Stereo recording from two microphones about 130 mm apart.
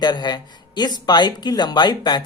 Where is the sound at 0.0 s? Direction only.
35° left (ahead or behind).